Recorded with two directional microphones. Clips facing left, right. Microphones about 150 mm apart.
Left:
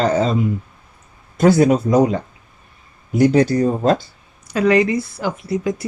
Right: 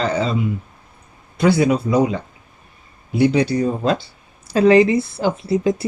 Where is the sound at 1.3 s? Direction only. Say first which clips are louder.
Left 3 dB; 45° left (ahead or behind).